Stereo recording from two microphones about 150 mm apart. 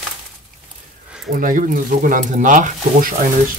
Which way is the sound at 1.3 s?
65° right (ahead or behind).